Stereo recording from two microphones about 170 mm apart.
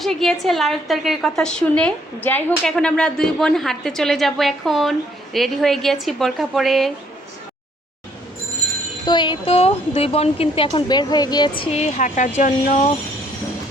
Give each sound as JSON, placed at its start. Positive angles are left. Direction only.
{"t": 0.0, "sound": "a woman's voice", "side_deg": 0}
{"t": 9.0, "sound": "speech", "side_deg": 25}
{"t": 10.7, "sound": "speech", "side_deg": 25}